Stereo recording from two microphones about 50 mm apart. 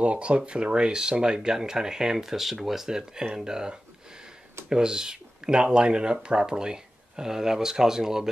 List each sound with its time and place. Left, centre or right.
0.0 s speech: right